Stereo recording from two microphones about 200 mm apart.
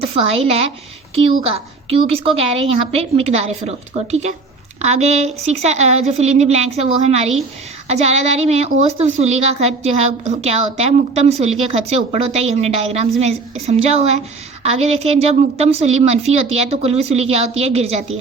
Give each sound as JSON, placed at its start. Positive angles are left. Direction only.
{"t": 0.0, "sound": "a woman's voice", "side_deg": -30}